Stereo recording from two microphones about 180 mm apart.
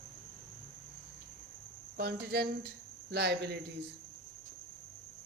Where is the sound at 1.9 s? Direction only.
60° right (ahead or behind).